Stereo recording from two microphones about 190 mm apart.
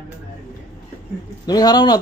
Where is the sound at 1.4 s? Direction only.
20° left (ahead or behind).